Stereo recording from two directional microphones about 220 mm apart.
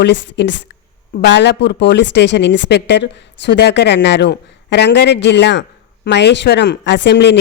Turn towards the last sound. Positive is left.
turn(degrees=50)  # may be behind; listen again after turning